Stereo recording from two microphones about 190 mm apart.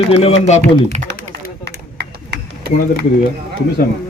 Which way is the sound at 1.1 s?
60° right (ahead or behind).